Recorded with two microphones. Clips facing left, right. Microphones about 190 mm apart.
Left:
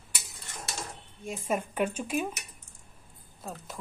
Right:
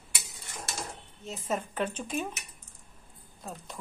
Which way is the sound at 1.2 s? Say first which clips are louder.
Left 2 dB; 10° left (ahead or behind).